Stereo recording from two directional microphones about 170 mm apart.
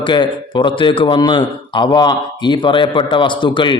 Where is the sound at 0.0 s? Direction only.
30° left (ahead or behind).